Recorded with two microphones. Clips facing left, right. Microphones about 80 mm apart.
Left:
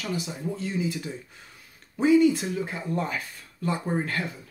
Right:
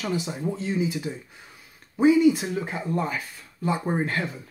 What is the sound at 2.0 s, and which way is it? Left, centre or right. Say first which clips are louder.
Speech: right 1 dB; centre.